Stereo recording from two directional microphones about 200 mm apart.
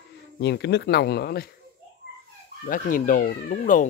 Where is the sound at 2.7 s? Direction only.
45° left (ahead or behind).